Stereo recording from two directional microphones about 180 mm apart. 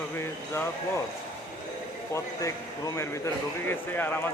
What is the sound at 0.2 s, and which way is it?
Speech, 15° left (ahead or behind).